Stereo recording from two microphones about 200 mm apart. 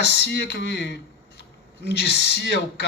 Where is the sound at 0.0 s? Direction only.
55° left (ahead or behind).